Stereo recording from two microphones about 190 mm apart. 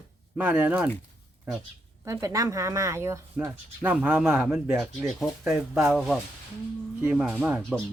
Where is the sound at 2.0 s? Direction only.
15° right (ahead or behind).